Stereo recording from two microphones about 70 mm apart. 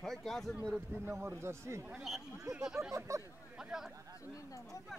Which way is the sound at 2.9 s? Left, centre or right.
Right.